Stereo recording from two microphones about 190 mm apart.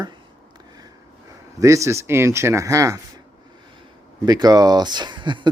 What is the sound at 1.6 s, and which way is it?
Speech, 15° right (ahead or behind).